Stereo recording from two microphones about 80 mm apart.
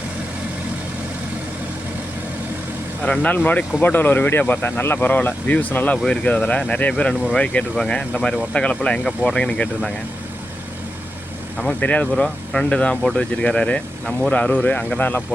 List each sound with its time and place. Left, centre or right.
3.0 s speech: centre
11.5 s speech: centre